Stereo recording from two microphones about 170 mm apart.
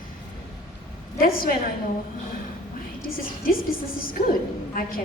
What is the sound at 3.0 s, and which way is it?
A woman's voice, 60° left (ahead or behind).